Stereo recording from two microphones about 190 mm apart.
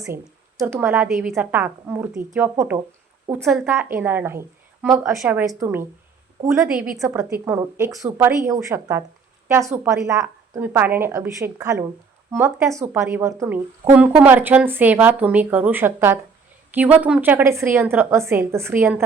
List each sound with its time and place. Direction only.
0.6 s a woman's voice: 10° right (ahead or behind)